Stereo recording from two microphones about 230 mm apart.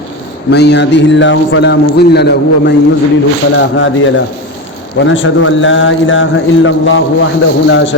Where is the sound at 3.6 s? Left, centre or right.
Left.